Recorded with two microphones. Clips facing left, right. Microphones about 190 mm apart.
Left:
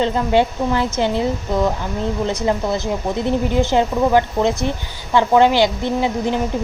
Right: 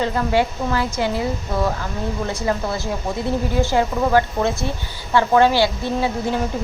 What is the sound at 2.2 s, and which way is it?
A woman's voice, 20° left (ahead or behind).